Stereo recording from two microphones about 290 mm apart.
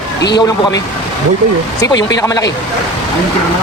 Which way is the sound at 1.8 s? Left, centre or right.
Centre.